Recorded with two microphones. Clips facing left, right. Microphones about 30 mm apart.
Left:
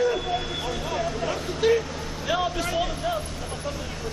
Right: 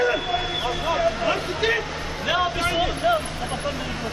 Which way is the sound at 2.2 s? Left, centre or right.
Right.